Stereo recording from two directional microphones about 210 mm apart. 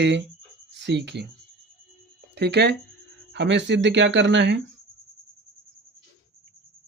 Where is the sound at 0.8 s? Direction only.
55° right (ahead or behind).